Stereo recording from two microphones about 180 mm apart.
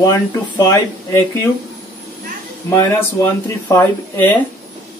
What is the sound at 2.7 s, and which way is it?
Speech, 15° left (ahead or behind).